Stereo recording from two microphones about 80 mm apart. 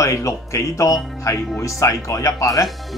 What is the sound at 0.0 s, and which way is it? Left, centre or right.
Speech, left.